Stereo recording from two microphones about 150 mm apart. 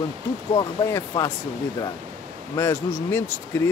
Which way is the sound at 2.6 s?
15° left (ahead or behind).